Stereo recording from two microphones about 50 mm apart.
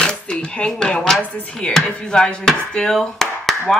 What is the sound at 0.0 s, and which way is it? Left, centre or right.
Speech, centre.